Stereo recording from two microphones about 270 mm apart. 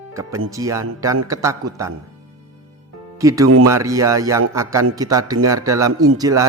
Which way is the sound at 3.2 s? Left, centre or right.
Centre.